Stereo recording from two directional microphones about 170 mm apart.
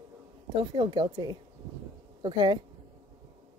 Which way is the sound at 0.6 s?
25° right (ahead or behind).